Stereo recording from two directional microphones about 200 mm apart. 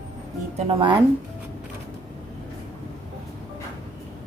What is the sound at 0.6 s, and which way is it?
Speech, 25° right (ahead or behind).